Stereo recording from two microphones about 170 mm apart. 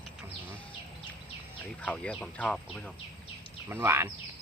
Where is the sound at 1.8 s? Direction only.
5° left (ahead or behind).